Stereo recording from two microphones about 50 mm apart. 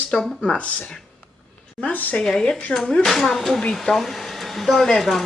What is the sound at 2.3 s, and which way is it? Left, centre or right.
Speech, centre.